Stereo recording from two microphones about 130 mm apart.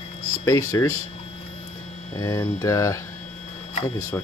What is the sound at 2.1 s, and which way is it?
Speech, 25° left (ahead or behind).